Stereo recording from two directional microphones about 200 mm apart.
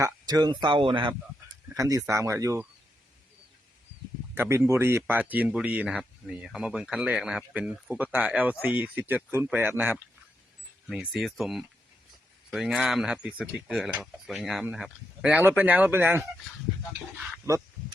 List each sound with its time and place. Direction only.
0.0 s speech: 20° right (ahead or behind)
4.4 s speech: 10° right (ahead or behind)